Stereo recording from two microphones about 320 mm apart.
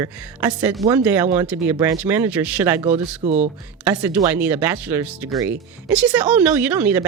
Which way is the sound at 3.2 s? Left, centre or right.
Right.